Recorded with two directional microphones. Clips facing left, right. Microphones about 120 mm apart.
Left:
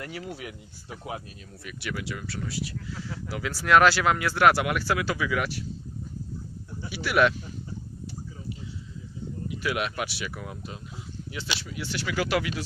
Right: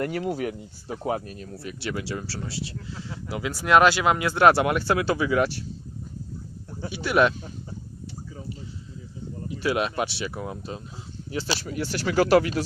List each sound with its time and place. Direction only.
0.3 s speech: 40° right (ahead or behind)
1.6 s speech: 30° right (ahead or behind)
6.9 s speech: 25° right (ahead or behind)
9.5 s speech: 30° right (ahead or behind)